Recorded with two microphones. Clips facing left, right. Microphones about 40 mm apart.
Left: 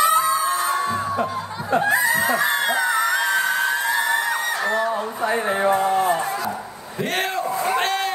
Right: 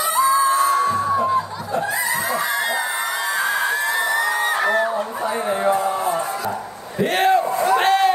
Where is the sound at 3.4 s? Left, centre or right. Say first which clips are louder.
Even; right.